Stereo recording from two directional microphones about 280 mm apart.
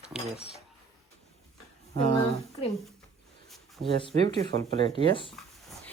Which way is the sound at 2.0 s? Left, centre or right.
Centre.